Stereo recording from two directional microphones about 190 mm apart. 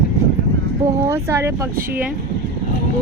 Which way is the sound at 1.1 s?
10° right (ahead or behind).